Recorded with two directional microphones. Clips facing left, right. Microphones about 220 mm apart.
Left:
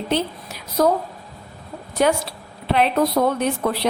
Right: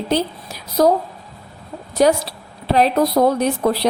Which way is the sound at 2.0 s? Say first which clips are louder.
Right 4 dB; 35° right (ahead or behind).